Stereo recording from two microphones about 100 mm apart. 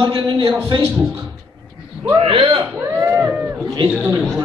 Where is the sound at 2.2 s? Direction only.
60° right (ahead or behind).